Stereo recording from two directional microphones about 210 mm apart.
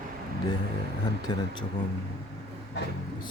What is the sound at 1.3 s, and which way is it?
Speech, 20° left (ahead or behind).